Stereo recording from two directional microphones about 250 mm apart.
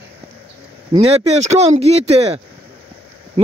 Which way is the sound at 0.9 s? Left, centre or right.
Right.